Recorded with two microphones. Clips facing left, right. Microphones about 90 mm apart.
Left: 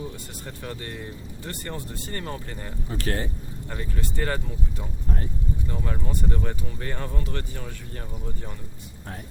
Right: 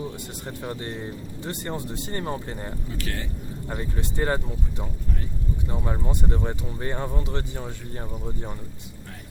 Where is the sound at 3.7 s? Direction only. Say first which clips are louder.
Right 2 dB; 20° right (ahead or behind).